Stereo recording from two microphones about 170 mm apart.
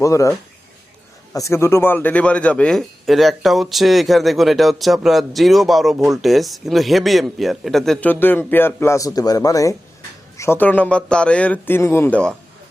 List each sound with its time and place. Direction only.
0.0 s a man's voice: 20° left (ahead or behind)